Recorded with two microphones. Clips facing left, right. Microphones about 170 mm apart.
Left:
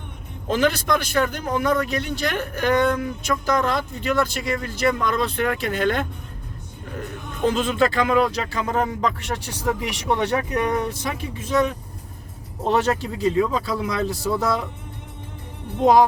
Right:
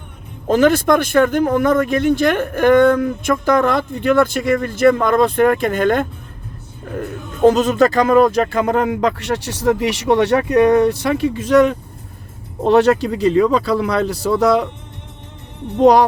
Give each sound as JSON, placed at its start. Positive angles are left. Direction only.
{"t": 0.4, "sound": "speech", "side_deg": -45}
{"t": 12.6, "sound": "speech", "side_deg": -70}
{"t": 15.8, "sound": "speech", "side_deg": -75}